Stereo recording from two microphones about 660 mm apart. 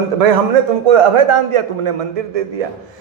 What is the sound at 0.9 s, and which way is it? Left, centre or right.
A man's voice, right.